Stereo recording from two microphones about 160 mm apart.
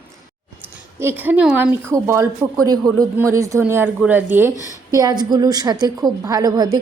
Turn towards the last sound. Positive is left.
turn(degrees=-25)  # may be behind; listen again after turning